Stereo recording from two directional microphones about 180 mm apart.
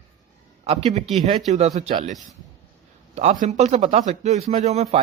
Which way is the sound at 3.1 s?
45° right (ahead or behind).